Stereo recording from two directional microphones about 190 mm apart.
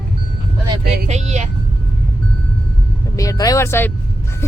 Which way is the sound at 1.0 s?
35° right (ahead or behind).